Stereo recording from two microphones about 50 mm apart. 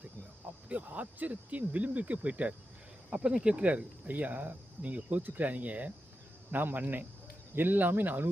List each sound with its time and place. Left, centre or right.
0.7 s speech: right
3.1 s speech: centre
6.5 s speech: right